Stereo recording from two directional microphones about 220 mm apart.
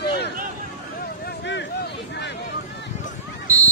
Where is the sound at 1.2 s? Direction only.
55° left (ahead or behind).